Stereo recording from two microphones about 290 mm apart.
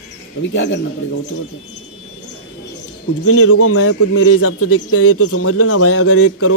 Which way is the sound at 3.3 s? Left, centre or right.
Left.